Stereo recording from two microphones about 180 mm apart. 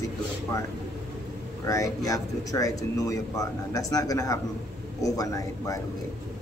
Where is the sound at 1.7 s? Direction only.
20° left (ahead or behind).